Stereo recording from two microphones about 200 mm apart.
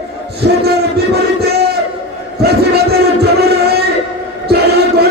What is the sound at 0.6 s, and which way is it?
Battle cry, 55° right (ahead or behind).